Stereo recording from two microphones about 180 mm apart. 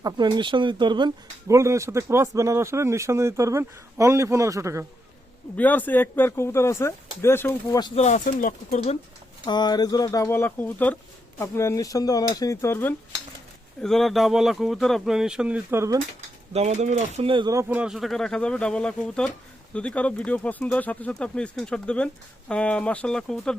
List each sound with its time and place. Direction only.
0.0 s speech: 25° right (ahead or behind)
5.5 s speech: 10° left (ahead or behind)
7.8 s speech: 25° left (ahead or behind)
8.0 s speech: 45° left (ahead or behind)
9.5 s speech: 25° left (ahead or behind)
13.8 s speech: centre (ahead or behind); by 16.0 s 15° right (ahead or behind)
16.5 s speech: 35° right (ahead or behind); by 23.6 s 5° left (ahead or behind)